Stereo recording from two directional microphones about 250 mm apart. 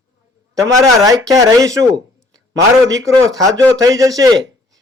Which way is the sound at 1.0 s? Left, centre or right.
Centre.